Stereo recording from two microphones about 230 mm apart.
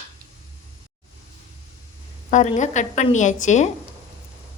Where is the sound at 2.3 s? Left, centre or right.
Left.